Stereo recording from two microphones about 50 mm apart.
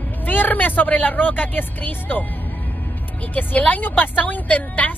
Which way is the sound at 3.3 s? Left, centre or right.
Left.